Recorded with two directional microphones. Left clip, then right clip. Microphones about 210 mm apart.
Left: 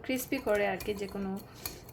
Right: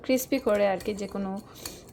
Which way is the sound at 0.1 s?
25° right (ahead or behind).